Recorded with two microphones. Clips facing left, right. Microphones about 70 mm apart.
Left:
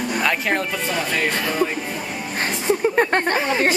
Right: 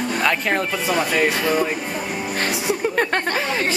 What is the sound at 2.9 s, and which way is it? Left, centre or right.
Speech, left.